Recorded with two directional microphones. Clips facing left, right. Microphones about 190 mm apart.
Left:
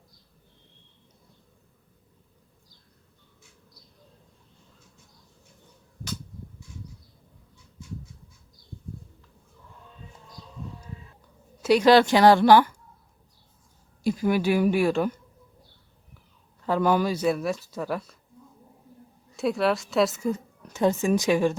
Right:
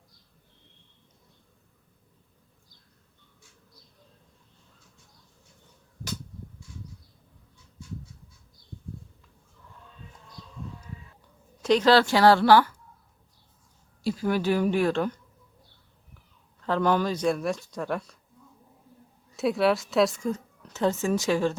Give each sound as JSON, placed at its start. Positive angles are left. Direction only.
{"t": 11.6, "sound": "a woman's voice", "side_deg": 10}
{"t": 14.0, "sound": "speech", "side_deg": 15}
{"t": 16.6, "sound": "speech", "side_deg": 10}
{"t": 19.4, "sound": "a woman's voice", "side_deg": 0}